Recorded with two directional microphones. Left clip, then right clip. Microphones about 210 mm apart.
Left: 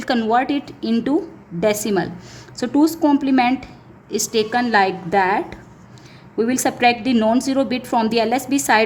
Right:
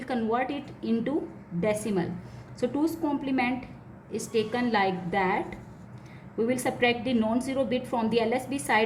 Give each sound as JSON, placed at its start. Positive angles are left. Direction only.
{"t": 0.1, "sound": "a woman's voice", "side_deg": 55}
{"t": 6.3, "sound": "a woman's voice", "side_deg": 50}